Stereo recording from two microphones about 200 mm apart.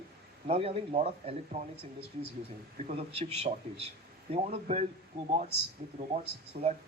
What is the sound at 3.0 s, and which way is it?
Speech, 30° right (ahead or behind).